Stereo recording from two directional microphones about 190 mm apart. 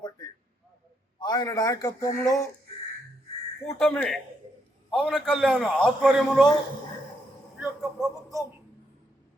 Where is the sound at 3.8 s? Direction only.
5° left (ahead or behind).